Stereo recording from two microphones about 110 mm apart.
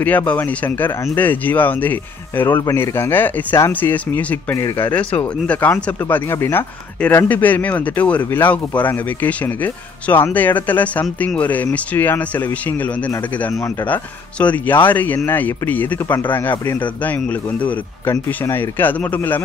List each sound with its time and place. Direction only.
0.0 s speech: 15° left (ahead or behind)
13.5 s speech: 25° left (ahead or behind)
13.8 s speech: 15° left (ahead or behind)